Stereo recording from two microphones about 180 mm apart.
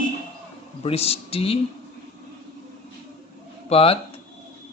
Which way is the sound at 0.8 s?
35° left (ahead or behind).